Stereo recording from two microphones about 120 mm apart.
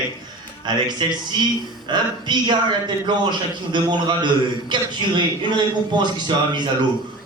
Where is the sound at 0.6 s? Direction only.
35° right (ahead or behind).